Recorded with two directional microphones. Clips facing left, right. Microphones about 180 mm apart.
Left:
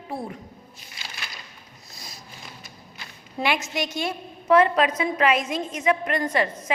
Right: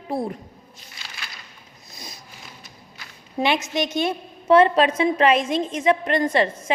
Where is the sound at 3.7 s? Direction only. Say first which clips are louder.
Right 5 dB; 20° right (ahead or behind).